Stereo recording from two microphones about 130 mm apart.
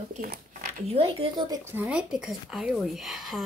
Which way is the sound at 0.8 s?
45° right (ahead or behind).